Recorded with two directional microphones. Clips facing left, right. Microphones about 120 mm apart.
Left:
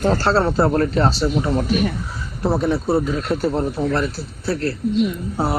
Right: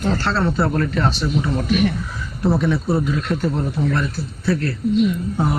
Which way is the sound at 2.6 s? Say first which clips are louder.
Left 1 dB; 35° left (ahead or behind).